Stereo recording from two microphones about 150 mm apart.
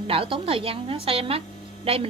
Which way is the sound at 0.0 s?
40° right (ahead or behind).